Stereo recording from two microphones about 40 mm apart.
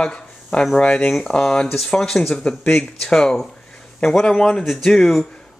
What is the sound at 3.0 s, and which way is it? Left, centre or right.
Speech, centre.